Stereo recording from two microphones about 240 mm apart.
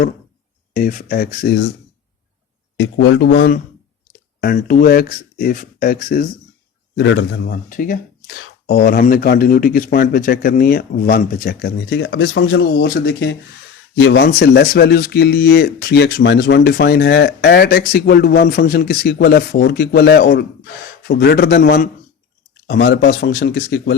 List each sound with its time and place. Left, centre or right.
0.7 s a man's voice: left
2.7 s speech: left
4.4 s a man's voice: left
6.9 s speech: left
7.4 s a man's voice: left
12.7 s a man's voice: left